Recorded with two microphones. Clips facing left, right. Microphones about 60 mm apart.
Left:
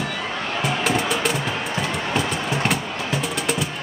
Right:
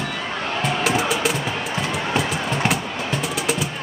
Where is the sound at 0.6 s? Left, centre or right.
Centre.